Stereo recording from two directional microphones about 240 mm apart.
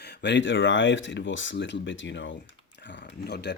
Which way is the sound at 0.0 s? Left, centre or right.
Left.